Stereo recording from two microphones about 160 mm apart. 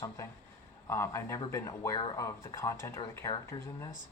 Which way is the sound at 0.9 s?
15° left (ahead or behind).